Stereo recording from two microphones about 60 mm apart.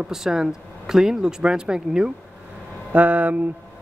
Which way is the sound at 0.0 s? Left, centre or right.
Centre.